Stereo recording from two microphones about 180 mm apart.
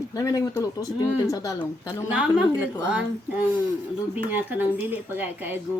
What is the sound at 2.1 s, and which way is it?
A woman's voice, 5° right (ahead or behind).